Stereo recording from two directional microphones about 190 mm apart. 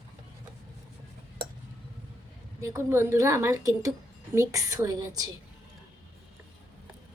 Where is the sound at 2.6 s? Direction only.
15° right (ahead or behind).